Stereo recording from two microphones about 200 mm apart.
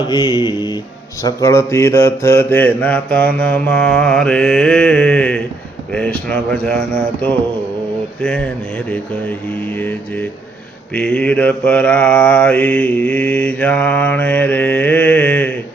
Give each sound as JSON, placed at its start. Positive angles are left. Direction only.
{"t": 0.1, "sound": "speech", "side_deg": 20}
{"t": 1.2, "sound": "mantra", "side_deg": 15}
{"t": 5.9, "sound": "speech", "side_deg": 5}
{"t": 9.5, "sound": "mantra", "side_deg": 10}